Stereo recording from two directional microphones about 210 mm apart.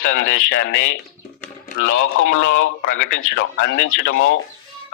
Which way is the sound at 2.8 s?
40° left (ahead or behind).